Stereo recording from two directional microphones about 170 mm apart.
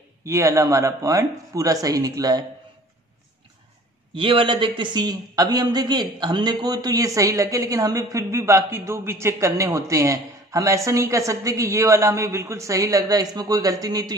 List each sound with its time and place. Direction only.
0.2 s a man's voice: 20° right (ahead or behind)
4.1 s a man's voice: 30° right (ahead or behind)